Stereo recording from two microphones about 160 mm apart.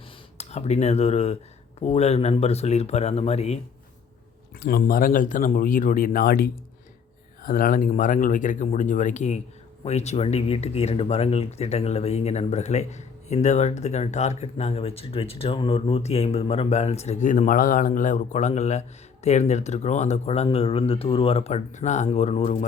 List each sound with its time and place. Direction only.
0.3 s speech: 45° left (ahead or behind)
4.6 s speech: 65° left (ahead or behind); by 22.5 s 45° left (ahead or behind)